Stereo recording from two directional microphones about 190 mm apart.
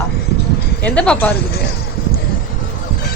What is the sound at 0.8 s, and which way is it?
Speech, 5° left (ahead or behind).